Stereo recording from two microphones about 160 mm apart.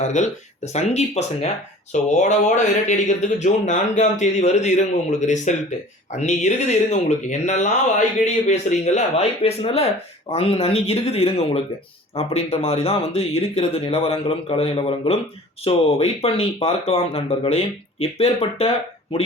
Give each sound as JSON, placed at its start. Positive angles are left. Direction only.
{"t": 0.0, "sound": "speech", "side_deg": 45}